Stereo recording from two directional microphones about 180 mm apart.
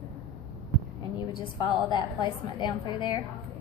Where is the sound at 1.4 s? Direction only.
25° left (ahead or behind).